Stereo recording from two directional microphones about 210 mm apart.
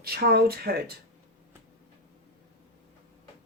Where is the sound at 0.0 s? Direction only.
50° right (ahead or behind).